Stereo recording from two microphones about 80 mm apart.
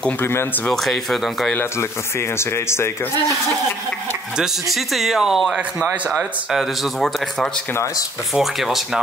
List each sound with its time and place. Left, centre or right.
0.2 s speech: left
0.7 s speech: centre
1.5 s speech: left
4.4 s speech: centre